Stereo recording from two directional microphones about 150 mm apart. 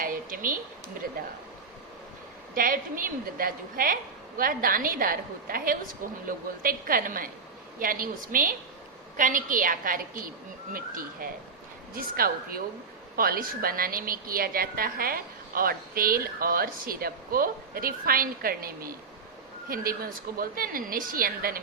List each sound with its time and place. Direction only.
0.0 s a sound: 65° right (ahead or behind)
2.6 s a woman's voice: 70° right (ahead or behind)
11.9 s a woman's voice: 80° right